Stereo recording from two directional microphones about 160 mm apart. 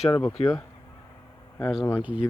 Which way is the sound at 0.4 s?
40° left (ahead or behind).